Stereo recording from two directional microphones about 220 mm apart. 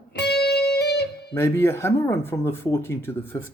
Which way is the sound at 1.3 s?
10° left (ahead or behind).